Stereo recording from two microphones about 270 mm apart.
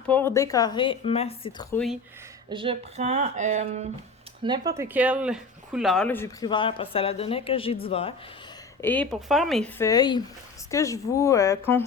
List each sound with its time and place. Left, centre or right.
0.1 s speech: centre
1.7 s speech: centre
2.5 s speech: centre
4.4 s speech: centre; by 8.1 s left
8.8 s speech: centre